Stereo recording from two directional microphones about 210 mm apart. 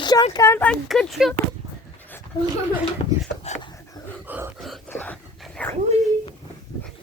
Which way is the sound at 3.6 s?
15° left (ahead or behind).